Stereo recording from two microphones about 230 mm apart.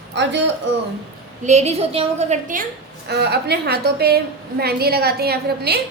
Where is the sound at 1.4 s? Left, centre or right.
Right.